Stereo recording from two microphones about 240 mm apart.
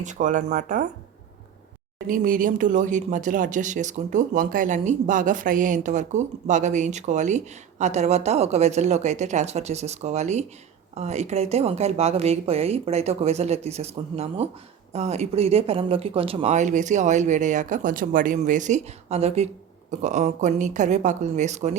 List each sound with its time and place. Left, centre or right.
0.0 s speech: right
2.0 s speech: right